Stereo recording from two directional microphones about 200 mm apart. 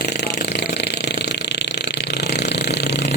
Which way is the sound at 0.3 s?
55° left (ahead or behind).